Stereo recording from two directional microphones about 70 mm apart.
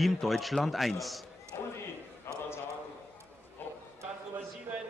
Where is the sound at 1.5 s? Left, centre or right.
Left.